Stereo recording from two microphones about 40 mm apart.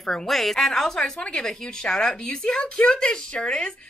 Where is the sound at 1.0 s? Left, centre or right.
Left.